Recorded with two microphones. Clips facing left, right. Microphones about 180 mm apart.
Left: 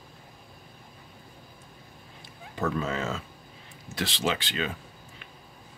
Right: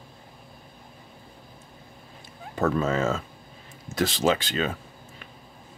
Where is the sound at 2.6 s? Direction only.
45° right (ahead or behind).